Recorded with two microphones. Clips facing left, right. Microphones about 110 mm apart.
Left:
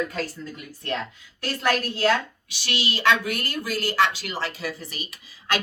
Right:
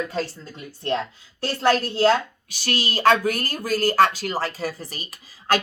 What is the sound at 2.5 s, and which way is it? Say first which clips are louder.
Speech: right 3 dB; 45° right (ahead or behind).